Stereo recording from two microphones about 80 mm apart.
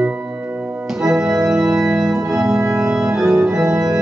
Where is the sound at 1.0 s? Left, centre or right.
Centre.